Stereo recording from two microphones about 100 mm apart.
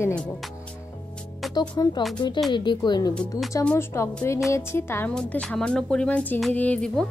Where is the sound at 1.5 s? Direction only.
45° left (ahead or behind).